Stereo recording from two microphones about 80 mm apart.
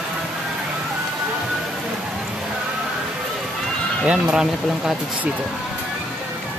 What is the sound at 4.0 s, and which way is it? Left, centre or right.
Speech, centre.